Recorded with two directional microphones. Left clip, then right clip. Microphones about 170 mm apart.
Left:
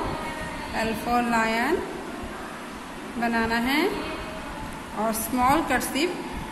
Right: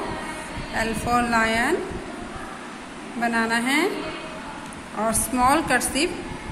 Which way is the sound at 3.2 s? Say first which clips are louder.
Right 2 dB; 15° right (ahead or behind).